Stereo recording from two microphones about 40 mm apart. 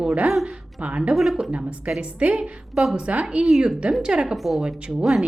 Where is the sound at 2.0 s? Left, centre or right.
Right.